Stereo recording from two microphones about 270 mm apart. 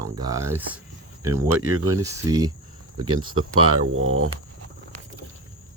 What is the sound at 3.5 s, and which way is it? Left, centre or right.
Speech, right.